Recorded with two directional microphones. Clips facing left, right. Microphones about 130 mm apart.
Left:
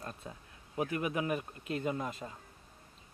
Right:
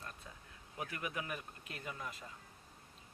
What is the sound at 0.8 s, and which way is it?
Speech, 25° left (ahead or behind).